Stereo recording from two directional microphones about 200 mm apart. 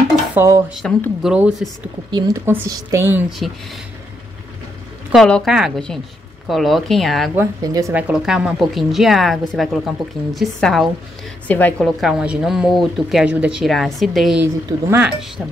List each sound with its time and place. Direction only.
0.3 s dishes: 15° right (ahead or behind)
0.7 s a woman's voice: centre (ahead or behind)
2.0 s a woman's voice: 20° right (ahead or behind); by 3.5 s centre (ahead or behind)
5.1 s a woman's voice: centre (ahead or behind)
7.3 s a woman's voice: 15° right (ahead or behind)
8.1 s a woman's voice: 5° right (ahead or behind)
14.4 s a woman's voice: 10° right (ahead or behind)